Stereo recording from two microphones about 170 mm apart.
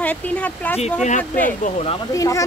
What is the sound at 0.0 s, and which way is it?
Speech, 10° left (ahead or behind).